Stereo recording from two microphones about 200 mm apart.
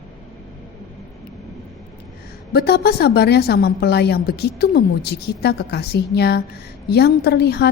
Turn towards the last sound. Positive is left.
turn(degrees=55)  # may be behind; listen again after turning